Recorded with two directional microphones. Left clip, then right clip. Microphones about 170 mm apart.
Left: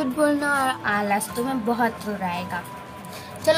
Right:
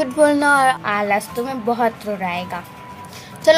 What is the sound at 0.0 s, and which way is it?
A woman's voice, 30° right (ahead or behind).